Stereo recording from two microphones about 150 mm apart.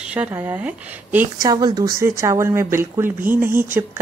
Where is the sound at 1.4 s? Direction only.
25° right (ahead or behind).